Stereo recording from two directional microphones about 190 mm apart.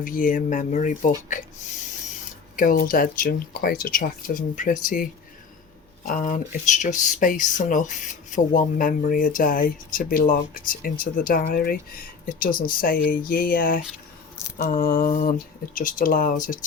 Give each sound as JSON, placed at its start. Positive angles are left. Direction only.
{"t": 0.0, "sound": "speech", "side_deg": 45}
{"t": 2.6, "sound": "speech", "side_deg": 45}
{"t": 6.1, "sound": "speech", "side_deg": 45}